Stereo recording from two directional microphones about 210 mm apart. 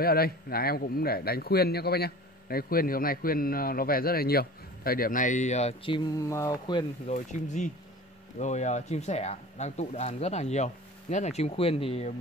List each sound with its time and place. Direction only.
0.0 s a man's voice: 45° left (ahead or behind); by 6.9 s 15° left (ahead or behind)
7.1 s speech: 35° left (ahead or behind)